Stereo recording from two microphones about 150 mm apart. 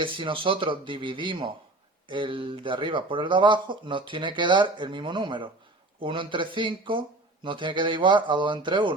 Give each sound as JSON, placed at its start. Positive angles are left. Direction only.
{"t": 0.0, "sound": "speech", "side_deg": -35}